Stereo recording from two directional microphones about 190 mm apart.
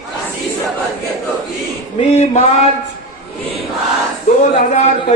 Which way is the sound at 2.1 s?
35° left (ahead or behind).